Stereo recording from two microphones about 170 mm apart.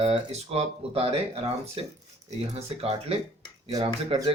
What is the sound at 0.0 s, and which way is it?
Speech, 35° right (ahead or behind).